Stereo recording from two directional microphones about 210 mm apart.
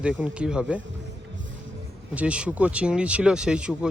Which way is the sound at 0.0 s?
5° right (ahead or behind).